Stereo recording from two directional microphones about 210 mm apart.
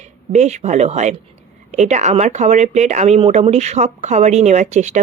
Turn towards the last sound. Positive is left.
turn(degrees=-35)  # may be behind; listen again after turning